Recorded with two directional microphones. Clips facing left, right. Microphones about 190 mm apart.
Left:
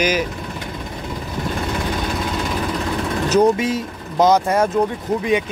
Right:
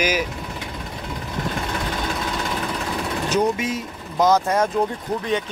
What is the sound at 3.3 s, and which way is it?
Speech, 35° left (ahead or behind).